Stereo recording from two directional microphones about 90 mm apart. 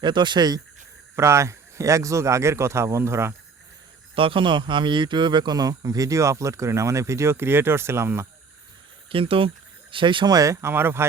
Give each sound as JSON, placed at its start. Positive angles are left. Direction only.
{"t": 0.0, "sound": "speech", "side_deg": -60}
{"t": 1.1, "sound": "speech", "side_deg": -30}
{"t": 4.1, "sound": "speech", "side_deg": -80}
{"t": 9.0, "sound": "speech", "side_deg": -90}
{"t": 9.9, "sound": "speech", "side_deg": -65}
{"t": 10.3, "sound": "speech", "side_deg": -35}